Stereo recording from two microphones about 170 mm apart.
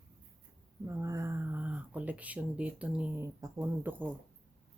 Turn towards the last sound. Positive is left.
turn(degrees=-15)  # may be behind; listen again after turning